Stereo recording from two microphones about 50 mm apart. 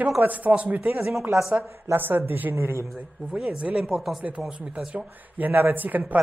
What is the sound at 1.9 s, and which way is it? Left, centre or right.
Speech, right.